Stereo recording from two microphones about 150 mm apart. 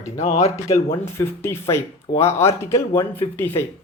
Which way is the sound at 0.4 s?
20° left (ahead or behind).